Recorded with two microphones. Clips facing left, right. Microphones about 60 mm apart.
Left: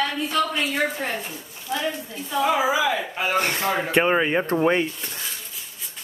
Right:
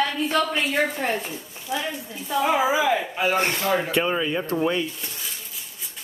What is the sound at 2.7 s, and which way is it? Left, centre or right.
Speech, right.